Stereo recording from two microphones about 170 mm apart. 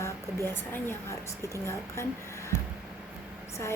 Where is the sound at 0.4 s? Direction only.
15° left (ahead or behind).